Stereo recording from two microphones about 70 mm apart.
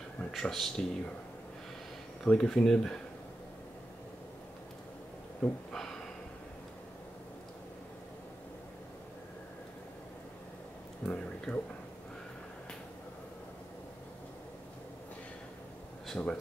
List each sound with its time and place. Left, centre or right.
0.3 s speech: centre
2.2 s speech: centre
5.4 s speech: centre
11.1 s speech: centre
16.2 s speech: left